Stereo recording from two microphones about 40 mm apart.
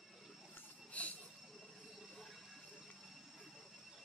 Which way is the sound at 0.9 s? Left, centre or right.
Left.